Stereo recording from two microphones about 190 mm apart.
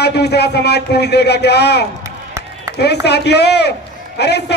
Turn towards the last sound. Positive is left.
turn(degrees=60)  # may be behind; listen again after turning